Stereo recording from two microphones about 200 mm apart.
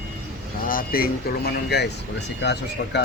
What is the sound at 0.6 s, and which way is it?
Speech, 45° left (ahead or behind).